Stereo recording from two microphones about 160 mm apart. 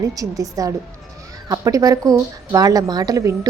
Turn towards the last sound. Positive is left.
turn(degrees=-20)  # may be behind; listen again after turning